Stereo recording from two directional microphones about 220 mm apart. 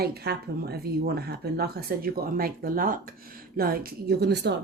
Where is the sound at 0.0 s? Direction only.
45° right (ahead or behind).